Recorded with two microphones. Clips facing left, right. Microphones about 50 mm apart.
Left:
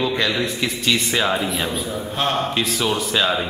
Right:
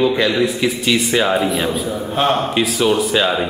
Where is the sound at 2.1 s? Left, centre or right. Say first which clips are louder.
Right 5 dB; right.